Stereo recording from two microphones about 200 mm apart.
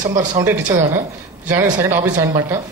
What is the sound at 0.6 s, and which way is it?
Speech, 40° right (ahead or behind).